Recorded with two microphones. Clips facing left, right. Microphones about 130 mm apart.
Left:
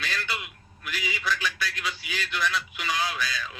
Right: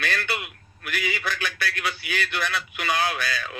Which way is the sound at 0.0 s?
60° right (ahead or behind).